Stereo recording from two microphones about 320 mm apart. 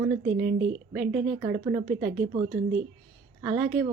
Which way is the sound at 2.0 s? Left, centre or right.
Right.